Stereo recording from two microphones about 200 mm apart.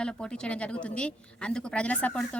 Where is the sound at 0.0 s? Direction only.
5° left (ahead or behind).